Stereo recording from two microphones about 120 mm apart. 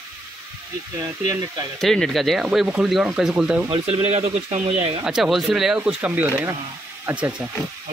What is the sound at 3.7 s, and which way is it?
Speech, 55° right (ahead or behind).